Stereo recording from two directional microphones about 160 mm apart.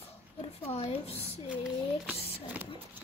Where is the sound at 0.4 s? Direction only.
40° left (ahead or behind).